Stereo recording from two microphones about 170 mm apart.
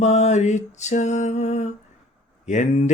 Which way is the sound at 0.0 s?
40° left (ahead or behind).